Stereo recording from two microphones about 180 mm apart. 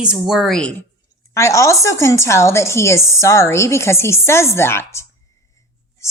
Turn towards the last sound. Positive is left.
turn(degrees=15)  # may be behind; listen again after turning